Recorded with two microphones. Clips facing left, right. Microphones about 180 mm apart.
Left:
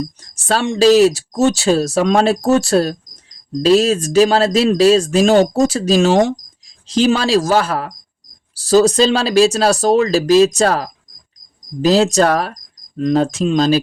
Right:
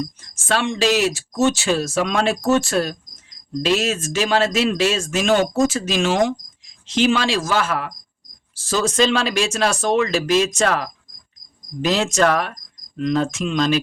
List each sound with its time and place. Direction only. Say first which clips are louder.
0.0 s speech: left 3 dB; 40° left (ahead or behind)